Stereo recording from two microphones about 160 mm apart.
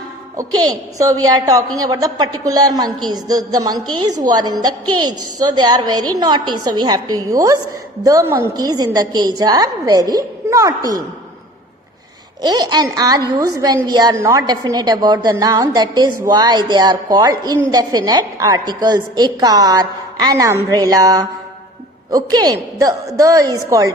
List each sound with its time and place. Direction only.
0.3 s a woman's voice: 25° right (ahead or behind)
12.4 s a woman's voice: 25° right (ahead or behind)